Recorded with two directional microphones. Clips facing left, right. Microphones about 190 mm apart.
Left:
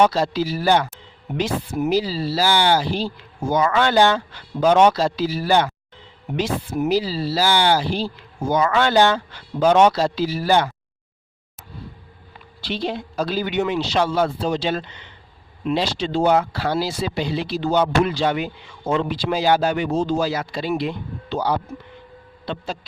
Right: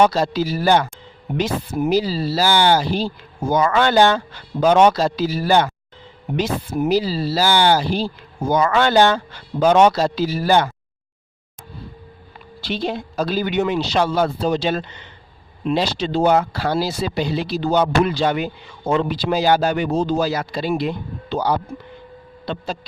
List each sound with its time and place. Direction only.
0.1 s speech: 45° right (ahead or behind)
12.6 s speech: 45° right (ahead or behind)